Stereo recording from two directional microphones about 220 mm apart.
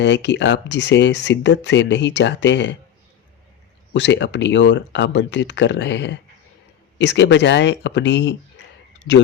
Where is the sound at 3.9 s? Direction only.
55° left (ahead or behind).